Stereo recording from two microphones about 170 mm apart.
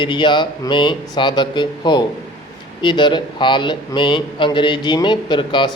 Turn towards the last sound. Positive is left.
turn(degrees=30)  # may be behind; listen again after turning